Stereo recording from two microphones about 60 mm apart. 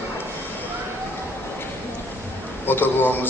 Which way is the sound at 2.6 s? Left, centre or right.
Left.